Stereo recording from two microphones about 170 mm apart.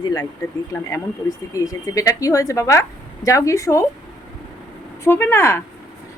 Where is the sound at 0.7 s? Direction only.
20° left (ahead or behind).